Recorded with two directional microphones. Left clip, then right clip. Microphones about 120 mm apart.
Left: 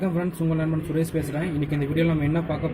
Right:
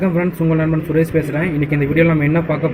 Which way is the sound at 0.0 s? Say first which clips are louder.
Right 9 dB; centre (ahead or behind).